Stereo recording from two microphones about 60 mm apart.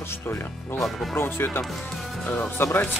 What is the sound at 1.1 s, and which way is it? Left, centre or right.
Speech, left.